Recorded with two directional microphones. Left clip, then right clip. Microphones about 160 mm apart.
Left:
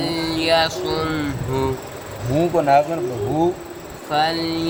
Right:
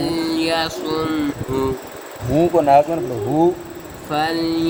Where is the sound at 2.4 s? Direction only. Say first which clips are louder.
Right 3 dB; 55° right (ahead or behind).